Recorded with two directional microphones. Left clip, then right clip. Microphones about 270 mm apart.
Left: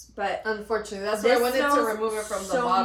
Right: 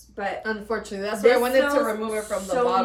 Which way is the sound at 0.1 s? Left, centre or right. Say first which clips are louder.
Even; centre.